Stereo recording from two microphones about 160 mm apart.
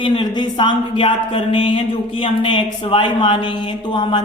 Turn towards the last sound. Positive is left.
turn(degrees=30)  # may be behind; listen again after turning